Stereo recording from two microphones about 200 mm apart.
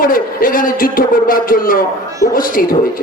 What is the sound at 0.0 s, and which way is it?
Speech, 45° left (ahead or behind).